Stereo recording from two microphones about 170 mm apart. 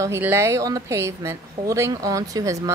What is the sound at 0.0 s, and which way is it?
A woman's voice, 15° right (ahead or behind).